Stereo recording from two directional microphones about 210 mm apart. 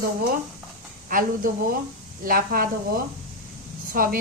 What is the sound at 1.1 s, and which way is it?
Speech, 40° right (ahead or behind).